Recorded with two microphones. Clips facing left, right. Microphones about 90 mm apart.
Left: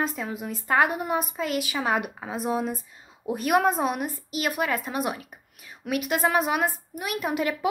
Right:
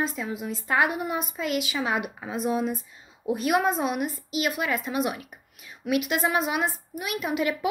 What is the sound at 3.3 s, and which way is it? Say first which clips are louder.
A woman's voice: left 2 dB; 50° left (ahead or behind).